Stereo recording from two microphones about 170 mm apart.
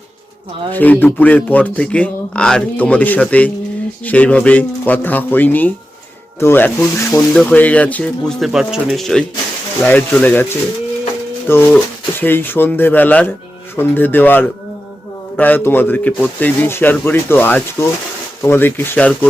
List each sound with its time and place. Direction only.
0.7 s a man's voice: 10° left (ahead or behind)